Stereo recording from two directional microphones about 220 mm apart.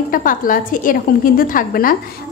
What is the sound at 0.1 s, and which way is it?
A woman's voice, 40° left (ahead or behind).